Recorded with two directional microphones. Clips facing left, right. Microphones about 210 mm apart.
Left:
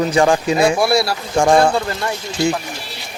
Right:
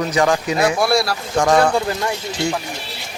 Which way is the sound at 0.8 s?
Centre (ahead or behind).